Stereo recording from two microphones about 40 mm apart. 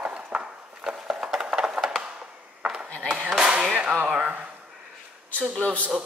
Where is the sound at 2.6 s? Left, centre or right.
Right.